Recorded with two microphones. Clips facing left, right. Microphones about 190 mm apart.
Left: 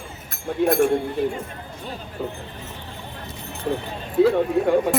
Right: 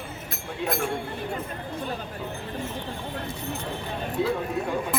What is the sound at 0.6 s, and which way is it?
Speech, 50° left (ahead or behind).